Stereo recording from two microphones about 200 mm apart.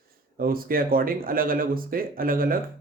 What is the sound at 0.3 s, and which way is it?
Speech, 45° right (ahead or behind).